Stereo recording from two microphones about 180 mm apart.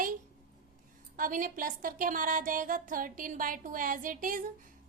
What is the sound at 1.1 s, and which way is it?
A woman's voice, 50° right (ahead or behind).